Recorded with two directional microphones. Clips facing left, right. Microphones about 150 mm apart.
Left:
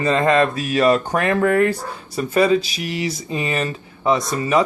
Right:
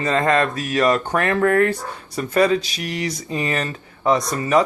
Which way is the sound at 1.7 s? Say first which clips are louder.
Left 1 dB; 10° left (ahead or behind).